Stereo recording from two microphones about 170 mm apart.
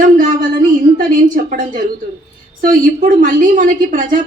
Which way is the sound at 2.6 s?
50° right (ahead or behind).